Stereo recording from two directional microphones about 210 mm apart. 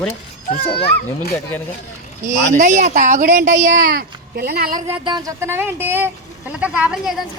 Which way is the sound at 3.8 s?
50° right (ahead or behind).